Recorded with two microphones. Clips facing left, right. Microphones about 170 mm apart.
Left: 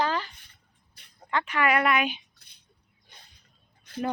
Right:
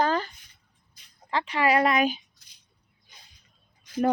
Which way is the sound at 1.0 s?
65° left (ahead or behind).